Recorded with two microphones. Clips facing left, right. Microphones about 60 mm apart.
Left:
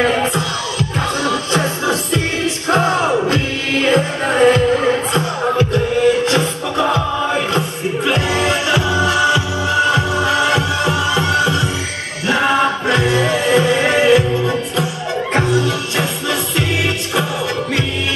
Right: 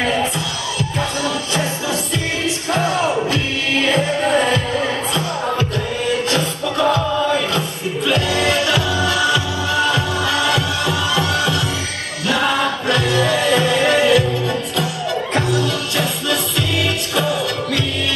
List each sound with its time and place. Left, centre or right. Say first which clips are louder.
0.0 s music: left 3 dB; left